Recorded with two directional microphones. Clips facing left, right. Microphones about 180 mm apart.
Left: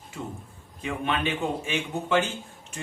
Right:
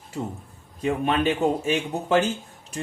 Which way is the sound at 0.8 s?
40° right (ahead or behind).